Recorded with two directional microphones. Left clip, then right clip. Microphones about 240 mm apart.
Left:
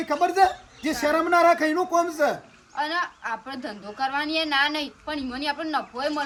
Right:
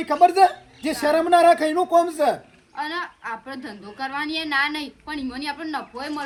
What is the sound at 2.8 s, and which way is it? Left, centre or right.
A woman's voice, centre.